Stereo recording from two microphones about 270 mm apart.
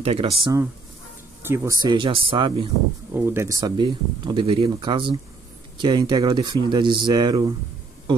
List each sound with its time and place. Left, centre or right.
0.0 s speech: right
3.1 s speech: centre